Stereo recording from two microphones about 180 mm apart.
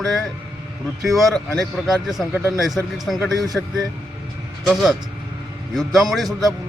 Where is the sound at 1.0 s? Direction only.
Centre (ahead or behind).